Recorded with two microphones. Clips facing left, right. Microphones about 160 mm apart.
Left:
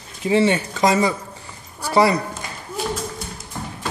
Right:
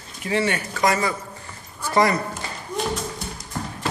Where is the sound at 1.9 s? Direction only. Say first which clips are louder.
Left 3 dB; 10° left (ahead or behind).